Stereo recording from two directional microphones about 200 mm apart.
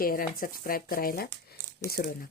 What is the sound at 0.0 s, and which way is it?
Speech, 45° left (ahead or behind).